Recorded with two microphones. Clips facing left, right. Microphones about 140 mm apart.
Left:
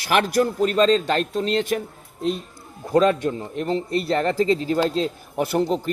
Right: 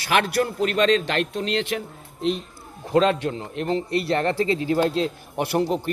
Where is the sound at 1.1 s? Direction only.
35° left (ahead or behind).